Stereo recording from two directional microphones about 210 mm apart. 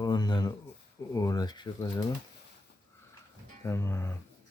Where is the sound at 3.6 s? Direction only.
10° left (ahead or behind).